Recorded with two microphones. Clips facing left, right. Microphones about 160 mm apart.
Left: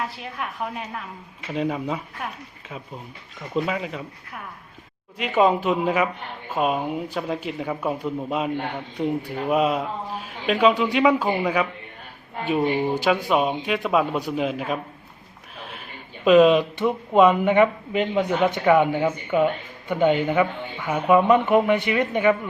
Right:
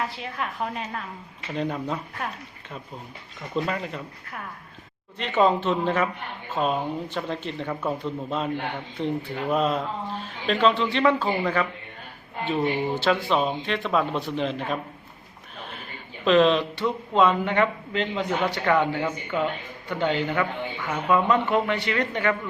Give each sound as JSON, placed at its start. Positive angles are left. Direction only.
{"t": 0.0, "sound": "speech", "side_deg": 0}
{"t": 3.5, "sound": "speech", "side_deg": 5}
{"t": 5.1, "sound": "speech", "side_deg": 10}
{"t": 16.2, "sound": "speech", "side_deg": 10}